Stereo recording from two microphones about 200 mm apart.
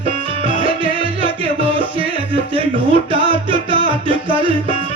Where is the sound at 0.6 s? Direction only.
25° right (ahead or behind).